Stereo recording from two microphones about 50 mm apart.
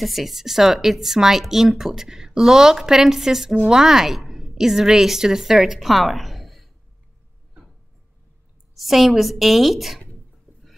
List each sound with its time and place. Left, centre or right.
0.0 s speech: centre
8.7 s a woman's voice: centre